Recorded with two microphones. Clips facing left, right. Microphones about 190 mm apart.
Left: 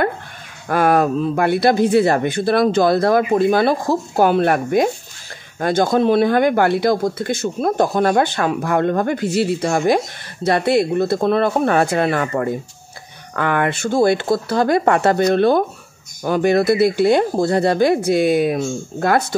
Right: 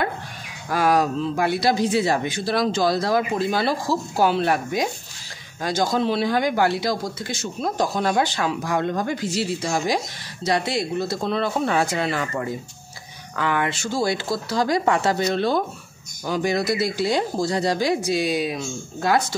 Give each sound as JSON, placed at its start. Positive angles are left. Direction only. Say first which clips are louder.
{"t": 0.7, "sound": "speech", "louder": "left 4 dB", "side_deg": 55}